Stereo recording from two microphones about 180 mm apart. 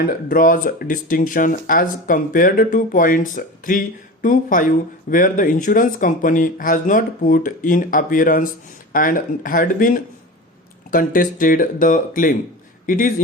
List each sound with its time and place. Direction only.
0.0 s speech: 50° left (ahead or behind)